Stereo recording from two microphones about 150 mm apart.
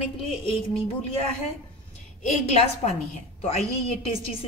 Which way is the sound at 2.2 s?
45° left (ahead or behind).